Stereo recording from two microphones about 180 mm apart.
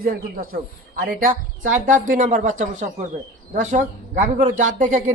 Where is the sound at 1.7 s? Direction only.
45° right (ahead or behind).